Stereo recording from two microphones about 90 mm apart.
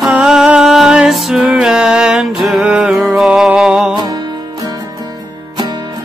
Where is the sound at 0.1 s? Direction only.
5° right (ahead or behind).